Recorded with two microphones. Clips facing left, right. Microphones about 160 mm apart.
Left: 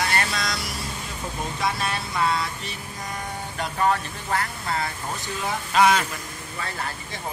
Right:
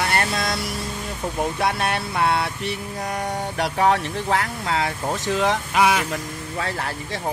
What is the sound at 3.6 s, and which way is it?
Speech, 75° right (ahead or behind).